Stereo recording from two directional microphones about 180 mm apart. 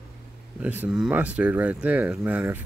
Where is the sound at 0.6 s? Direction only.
10° right (ahead or behind).